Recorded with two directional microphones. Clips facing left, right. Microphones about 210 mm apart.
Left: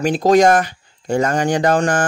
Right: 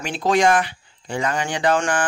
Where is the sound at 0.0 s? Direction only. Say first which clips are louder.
Left 6 dB; 40° left (ahead or behind).